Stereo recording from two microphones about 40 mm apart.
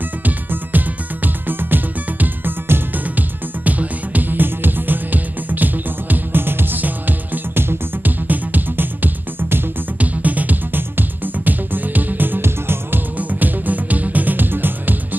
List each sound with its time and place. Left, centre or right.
0.2 s music: right
3.2 s music: right
7.5 s music: right
8.3 s music: right
9.9 s music: right
12.4 s music: right
13.2 s music: right